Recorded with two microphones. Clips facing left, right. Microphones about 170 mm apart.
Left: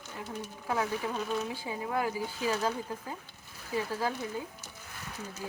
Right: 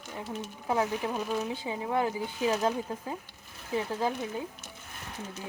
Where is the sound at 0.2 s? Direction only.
20° right (ahead or behind).